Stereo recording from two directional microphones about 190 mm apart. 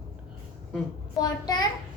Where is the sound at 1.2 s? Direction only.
20° left (ahead or behind).